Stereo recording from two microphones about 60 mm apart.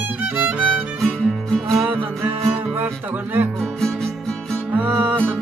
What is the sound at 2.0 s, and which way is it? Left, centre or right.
Music, right.